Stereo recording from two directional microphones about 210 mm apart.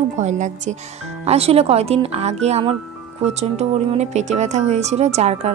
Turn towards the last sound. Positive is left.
turn(degrees=-30)  # may be behind; listen again after turning